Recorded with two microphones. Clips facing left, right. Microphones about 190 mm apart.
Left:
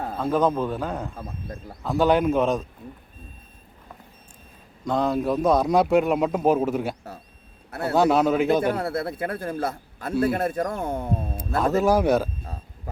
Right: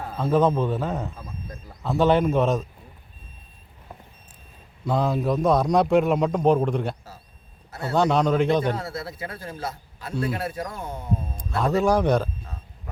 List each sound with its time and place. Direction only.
0.2 s speech: centre (ahead or behind)
4.9 s speech: 5° right (ahead or behind)
7.9 s speech: 5° left (ahead or behind)
8.7 s a man's voice: 60° left (ahead or behind)
11.3 s speech: centre (ahead or behind)